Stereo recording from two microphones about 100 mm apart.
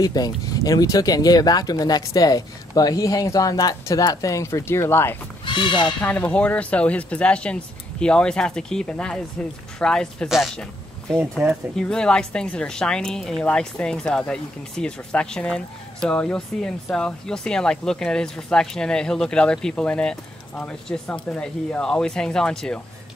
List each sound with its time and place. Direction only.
0.0 s speech: 40° left (ahead or behind); by 5.1 s 25° left (ahead or behind)
5.4 s horse: 55° left (ahead or behind)
5.9 s a woman's voice: 15° left (ahead or behind)